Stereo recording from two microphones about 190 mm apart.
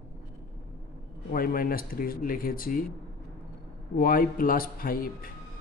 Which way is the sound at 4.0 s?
50° left (ahead or behind).